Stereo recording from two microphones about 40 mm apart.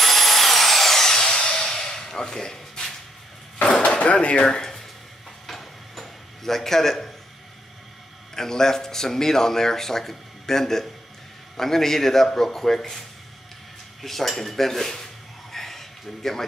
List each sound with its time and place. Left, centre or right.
0.0 s a sound: centre
4.0 s drawer open or close: left
4.5 s speech: centre
5.5 s tick-tock: centre
8.4 s speech: centre
14.0 s speech: centre
15.5 s a sound: centre